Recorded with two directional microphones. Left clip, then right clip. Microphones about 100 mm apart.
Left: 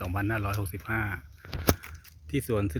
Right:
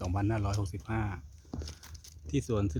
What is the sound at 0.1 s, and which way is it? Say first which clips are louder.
Speech: left 4 dB; 15° right (ahead or behind).